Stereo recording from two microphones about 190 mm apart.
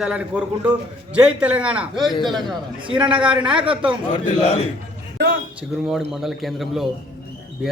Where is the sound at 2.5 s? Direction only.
25° right (ahead or behind).